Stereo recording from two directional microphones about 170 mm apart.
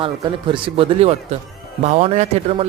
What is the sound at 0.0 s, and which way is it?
A woman's voice, 30° right (ahead or behind).